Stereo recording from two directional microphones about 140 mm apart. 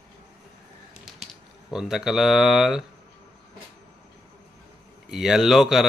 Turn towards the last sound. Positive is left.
turn(degrees=0)  # may be behind; listen again after turning